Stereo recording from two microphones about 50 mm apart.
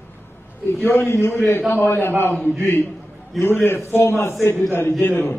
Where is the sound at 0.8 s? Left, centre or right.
Left.